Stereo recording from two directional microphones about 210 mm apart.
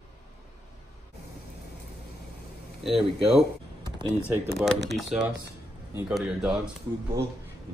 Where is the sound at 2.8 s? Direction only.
Centre (ahead or behind).